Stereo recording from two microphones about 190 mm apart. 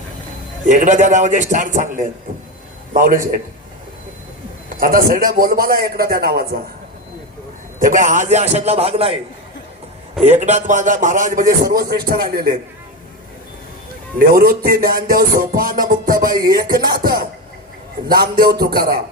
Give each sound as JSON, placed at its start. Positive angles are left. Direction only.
{"t": 0.6, "sound": "a man's voice", "side_deg": -40}
{"t": 2.9, "sound": "a man's voice", "side_deg": -45}
{"t": 4.8, "sound": "music", "side_deg": -50}
{"t": 7.8, "sound": "a man's voice", "side_deg": -45}
{"t": 10.2, "sound": "music", "side_deg": -35}
{"t": 14.2, "sound": "music", "side_deg": -50}